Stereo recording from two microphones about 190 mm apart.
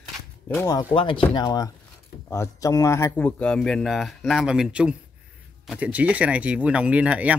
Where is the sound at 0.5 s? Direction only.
20° left (ahead or behind).